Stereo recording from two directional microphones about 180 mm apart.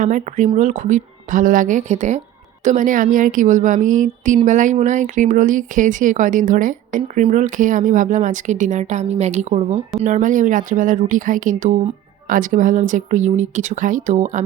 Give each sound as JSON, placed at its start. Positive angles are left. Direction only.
{"t": 0.0, "sound": "speech", "side_deg": -45}